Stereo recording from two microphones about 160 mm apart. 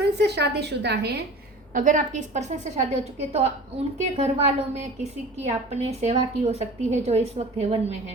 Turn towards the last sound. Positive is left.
turn(degrees=-40)  # may be behind; listen again after turning